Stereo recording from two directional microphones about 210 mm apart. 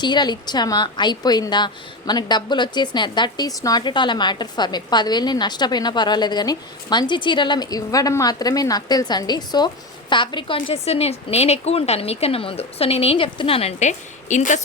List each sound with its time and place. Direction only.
0.0 s a woman's voice: 20° left (ahead or behind)